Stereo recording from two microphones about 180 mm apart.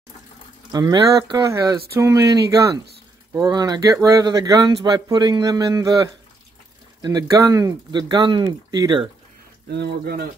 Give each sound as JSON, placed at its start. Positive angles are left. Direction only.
{"t": 0.7, "sound": "speech", "side_deg": -20}
{"t": 7.0, "sound": "speech", "side_deg": -20}
{"t": 9.7, "sound": "speech", "side_deg": -65}